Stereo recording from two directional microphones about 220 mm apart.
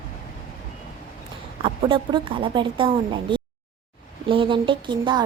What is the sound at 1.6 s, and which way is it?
A woman's voice, 25° right (ahead or behind).